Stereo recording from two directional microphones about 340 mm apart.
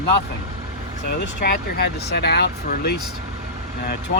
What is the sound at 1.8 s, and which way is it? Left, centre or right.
Speech, left.